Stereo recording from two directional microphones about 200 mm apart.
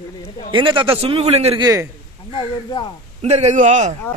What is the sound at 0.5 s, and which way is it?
A man's voice, 25° right (ahead or behind).